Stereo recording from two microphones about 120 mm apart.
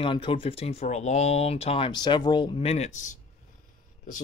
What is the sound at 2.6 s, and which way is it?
Speech, 65° left (ahead or behind).